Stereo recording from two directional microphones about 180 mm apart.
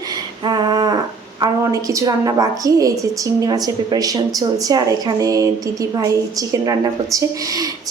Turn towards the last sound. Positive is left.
turn(degrees=-20)  # may be behind; listen again after turning